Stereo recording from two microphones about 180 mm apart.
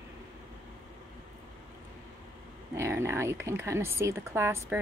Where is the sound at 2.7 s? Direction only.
15° right (ahead or behind).